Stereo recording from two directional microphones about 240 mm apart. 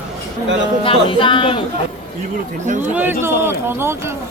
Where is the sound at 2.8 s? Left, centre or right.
Centre.